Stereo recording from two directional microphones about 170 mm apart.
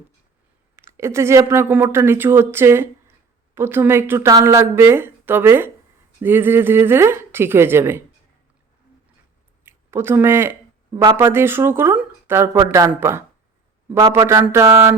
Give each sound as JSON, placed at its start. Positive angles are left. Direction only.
{"t": 0.8, "sound": "a woman's voice", "side_deg": -15}
{"t": 9.6, "sound": "a woman's voice", "side_deg": -15}